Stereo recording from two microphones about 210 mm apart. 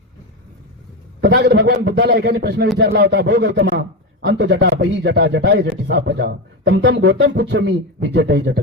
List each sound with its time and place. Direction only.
1.2 s a man's voice: 50° right (ahead or behind)